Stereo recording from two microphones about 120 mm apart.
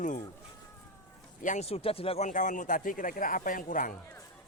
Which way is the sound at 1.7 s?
55° left (ahead or behind).